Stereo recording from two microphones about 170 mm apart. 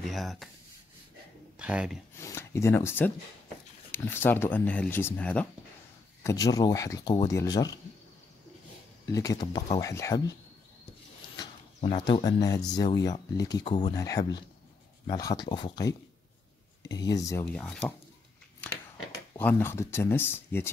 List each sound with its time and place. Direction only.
0.0 s speech: centre (ahead or behind)
1.6 s speech: 5° right (ahead or behind)
2.1 s speech: 15° left (ahead or behind)
6.2 s speech: 20° left (ahead or behind)
9.1 s speech: 20° left (ahead or behind)
12.1 s speech: 25° left (ahead or behind)
17.6 s speech: 5° left (ahead or behind)
18.6 s a sound: 5° left (ahead or behind)
19.3 s speech: 10° left (ahead or behind)